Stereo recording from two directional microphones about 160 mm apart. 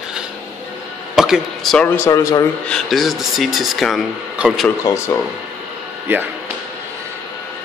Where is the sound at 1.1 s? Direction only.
Centre (ahead or behind).